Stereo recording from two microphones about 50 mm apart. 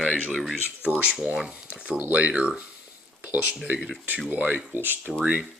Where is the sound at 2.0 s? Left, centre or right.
Right.